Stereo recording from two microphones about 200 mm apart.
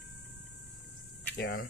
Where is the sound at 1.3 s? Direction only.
50° left (ahead or behind).